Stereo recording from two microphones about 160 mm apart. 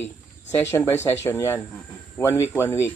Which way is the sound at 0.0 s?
15° left (ahead or behind).